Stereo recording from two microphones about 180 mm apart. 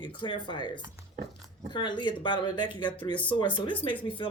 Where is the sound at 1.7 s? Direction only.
25° left (ahead or behind).